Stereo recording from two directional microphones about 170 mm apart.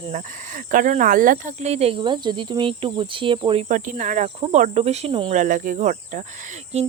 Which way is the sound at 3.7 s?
50° right (ahead or behind).